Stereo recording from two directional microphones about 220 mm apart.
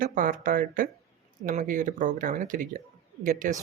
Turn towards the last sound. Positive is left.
turn(degrees=-40)  # may be behind; listen again after turning